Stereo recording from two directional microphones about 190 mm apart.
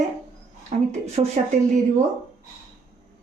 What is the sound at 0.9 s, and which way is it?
Speech, 35° right (ahead or behind).